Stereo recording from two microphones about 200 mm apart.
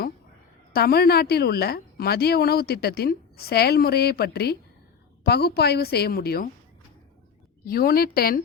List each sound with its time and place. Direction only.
0.7 s a woman's voice: 50° left (ahead or behind)
7.6 s a woman's voice: 45° left (ahead or behind)